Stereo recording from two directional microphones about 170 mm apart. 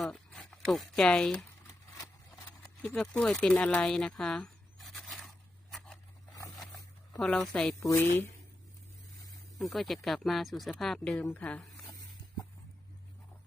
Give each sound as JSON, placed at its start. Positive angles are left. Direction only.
{"t": 0.0, "sound": "speech", "side_deg": 5}
{"t": 2.8, "sound": "speech", "side_deg": 5}
{"t": 5.7, "sound": "a sound", "side_deg": 5}
{"t": 7.2, "sound": "speech", "side_deg": 0}
{"t": 7.8, "sound": "a woman's voice", "side_deg": 15}
{"t": 9.6, "sound": "speech", "side_deg": 0}